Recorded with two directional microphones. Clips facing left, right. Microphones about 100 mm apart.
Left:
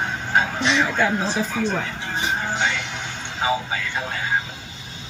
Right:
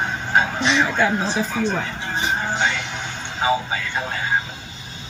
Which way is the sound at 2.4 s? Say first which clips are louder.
Right 1 dB; 30° right (ahead or behind).